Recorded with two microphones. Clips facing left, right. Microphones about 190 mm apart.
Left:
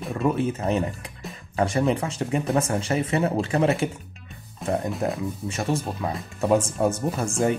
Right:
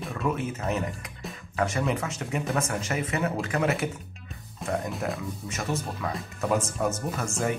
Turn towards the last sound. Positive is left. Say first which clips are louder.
# left 5 dB
turn(degrees=30)  # may be behind; listen again after turning